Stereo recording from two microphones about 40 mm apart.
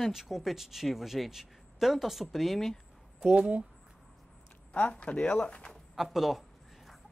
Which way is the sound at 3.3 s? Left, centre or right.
Right.